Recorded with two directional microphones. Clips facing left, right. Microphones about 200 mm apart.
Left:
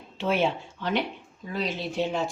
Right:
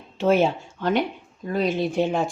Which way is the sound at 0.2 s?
45° right (ahead or behind).